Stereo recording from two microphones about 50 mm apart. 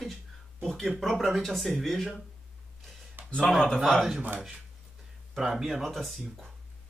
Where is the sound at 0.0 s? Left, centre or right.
Centre.